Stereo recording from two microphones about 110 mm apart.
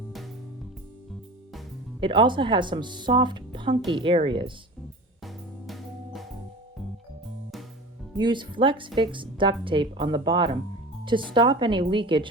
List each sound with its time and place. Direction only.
2.0 s speech: 50° right (ahead or behind)
5.2 s music: centre (ahead or behind)
8.1 s speech: 45° right (ahead or behind)